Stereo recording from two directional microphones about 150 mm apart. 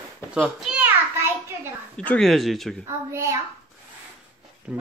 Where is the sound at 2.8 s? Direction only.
20° right (ahead or behind).